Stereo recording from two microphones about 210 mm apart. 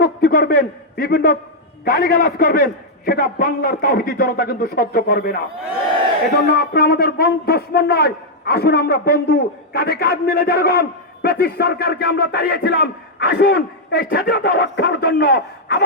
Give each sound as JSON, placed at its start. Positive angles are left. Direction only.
{"t": 0.0, "sound": "a man's voice", "side_deg": 45}
{"t": 6.4, "sound": "a man's voice", "side_deg": 50}